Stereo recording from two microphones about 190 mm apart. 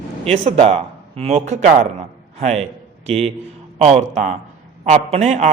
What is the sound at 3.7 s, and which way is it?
A man's voice, 35° right (ahead or behind).